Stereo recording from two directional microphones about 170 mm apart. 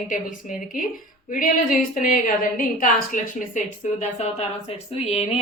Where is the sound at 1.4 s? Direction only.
50° left (ahead or behind).